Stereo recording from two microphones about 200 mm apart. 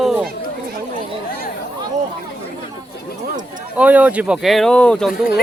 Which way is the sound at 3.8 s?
5° right (ahead or behind).